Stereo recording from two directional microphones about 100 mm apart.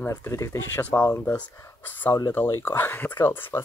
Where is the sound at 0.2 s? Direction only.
30° left (ahead or behind).